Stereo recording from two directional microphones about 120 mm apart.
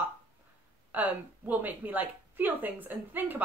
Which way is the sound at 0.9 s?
15° right (ahead or behind).